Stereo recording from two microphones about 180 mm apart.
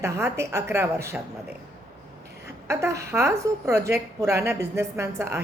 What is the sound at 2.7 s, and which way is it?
A woman's voice, 15° right (ahead or behind).